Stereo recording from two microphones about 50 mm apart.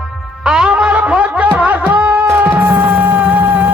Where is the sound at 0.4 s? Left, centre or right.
Centre.